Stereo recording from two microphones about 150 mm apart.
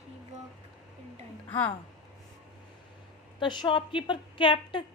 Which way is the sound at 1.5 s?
15° left (ahead or behind).